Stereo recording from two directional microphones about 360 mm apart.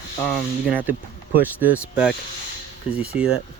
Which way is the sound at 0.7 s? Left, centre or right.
Centre.